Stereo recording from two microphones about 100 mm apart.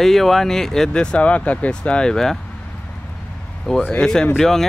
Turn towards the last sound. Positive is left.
turn(degrees=5)  # may be behind; listen again after turning